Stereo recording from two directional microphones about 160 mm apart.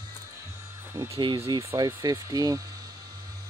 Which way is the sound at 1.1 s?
30° right (ahead or behind).